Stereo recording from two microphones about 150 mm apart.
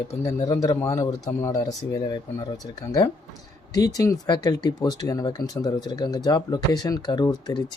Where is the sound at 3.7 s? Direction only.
25° left (ahead or behind).